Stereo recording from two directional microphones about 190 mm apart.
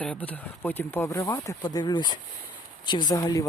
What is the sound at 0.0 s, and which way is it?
Speech, 5° left (ahead or behind).